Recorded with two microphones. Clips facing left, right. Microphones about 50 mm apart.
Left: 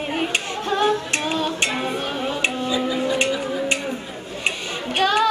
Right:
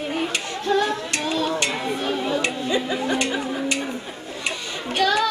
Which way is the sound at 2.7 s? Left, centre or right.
Right.